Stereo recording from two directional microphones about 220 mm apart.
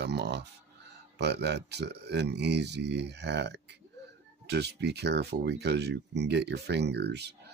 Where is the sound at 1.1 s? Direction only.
50° right (ahead or behind).